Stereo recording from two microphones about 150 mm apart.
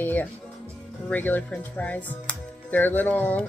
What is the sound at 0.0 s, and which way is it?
Speech, 10° left (ahead or behind).